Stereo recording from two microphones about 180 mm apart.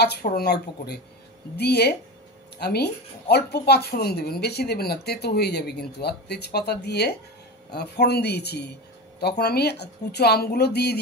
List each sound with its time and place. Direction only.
0.0 s a woman's voice: 60° left (ahead or behind)